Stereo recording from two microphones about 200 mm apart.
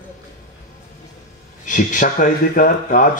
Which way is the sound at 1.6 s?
40° left (ahead or behind).